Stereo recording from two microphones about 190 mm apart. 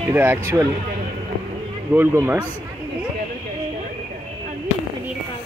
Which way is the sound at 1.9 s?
10° right (ahead or behind).